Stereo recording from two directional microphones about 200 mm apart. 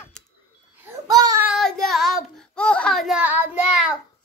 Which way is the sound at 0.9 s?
20° right (ahead or behind).